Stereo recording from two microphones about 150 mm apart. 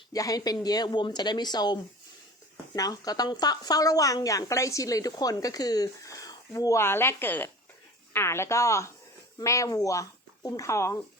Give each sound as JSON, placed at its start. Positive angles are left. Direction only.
{"t": 0.1, "sound": "a woman's voice", "side_deg": 25}